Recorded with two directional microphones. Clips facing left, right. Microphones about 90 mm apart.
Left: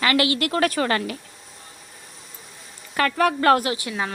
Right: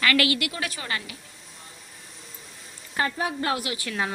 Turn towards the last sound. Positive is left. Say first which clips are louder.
# left 3 dB
turn(degrees=20)  # may be behind; listen again after turning